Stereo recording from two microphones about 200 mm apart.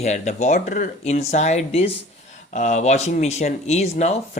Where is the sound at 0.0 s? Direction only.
35° left (ahead or behind).